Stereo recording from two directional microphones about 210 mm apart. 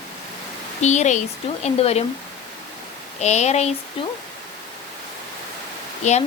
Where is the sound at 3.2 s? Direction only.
30° left (ahead or behind).